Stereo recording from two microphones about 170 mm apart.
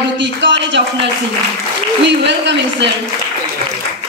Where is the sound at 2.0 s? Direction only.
90° right.